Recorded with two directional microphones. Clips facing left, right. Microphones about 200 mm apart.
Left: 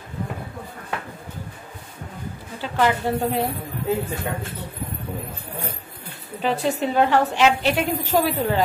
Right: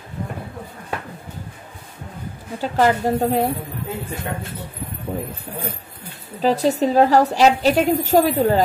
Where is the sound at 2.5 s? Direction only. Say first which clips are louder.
Right 4 dB; 40° right (ahead or behind).